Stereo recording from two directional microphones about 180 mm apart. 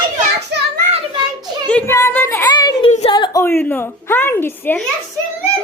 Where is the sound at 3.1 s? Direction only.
25° left (ahead or behind).